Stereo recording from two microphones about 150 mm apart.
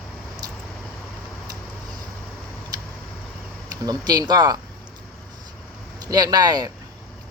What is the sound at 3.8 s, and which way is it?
Speech, 25° right (ahead or behind).